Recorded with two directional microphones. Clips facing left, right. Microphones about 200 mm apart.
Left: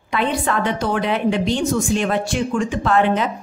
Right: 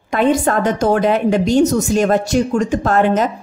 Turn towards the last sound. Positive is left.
turn(degrees=-45)  # may be behind; listen again after turning